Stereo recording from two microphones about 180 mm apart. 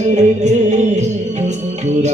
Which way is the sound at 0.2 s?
40° right (ahead or behind).